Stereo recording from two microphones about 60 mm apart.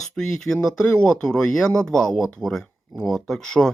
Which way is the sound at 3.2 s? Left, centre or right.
Centre.